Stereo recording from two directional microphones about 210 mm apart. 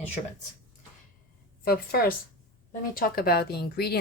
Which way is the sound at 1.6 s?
45° left (ahead or behind).